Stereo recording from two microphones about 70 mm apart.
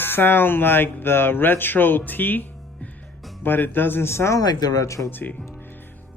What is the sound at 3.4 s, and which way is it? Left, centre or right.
Speech, left.